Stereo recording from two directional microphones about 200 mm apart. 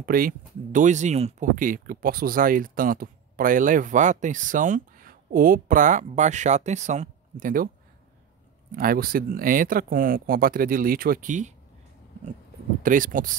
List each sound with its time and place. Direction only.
0.0 s speech: 45° right (ahead or behind)
8.7 s speech: 45° right (ahead or behind)
12.8 s speech: 40° right (ahead or behind)